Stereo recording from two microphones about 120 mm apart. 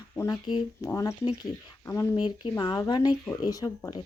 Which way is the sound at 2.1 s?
40° left (ahead or behind).